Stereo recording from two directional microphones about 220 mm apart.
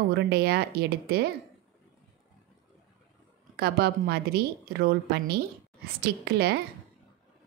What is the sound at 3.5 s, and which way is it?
A woman's voice, 45° right (ahead or behind).